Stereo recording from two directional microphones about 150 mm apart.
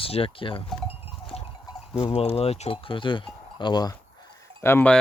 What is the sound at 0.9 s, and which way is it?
Goat, 40° left (ahead or behind).